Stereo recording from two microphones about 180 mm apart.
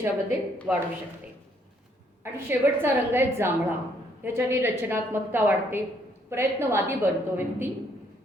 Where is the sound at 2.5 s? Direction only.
10° right (ahead or behind).